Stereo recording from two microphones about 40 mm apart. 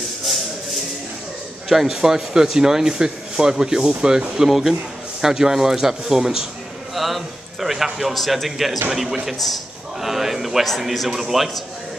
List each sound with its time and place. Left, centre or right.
1.7 s speech: centre
4.4 s a man's voice: centre
7.0 s a man's voice: centre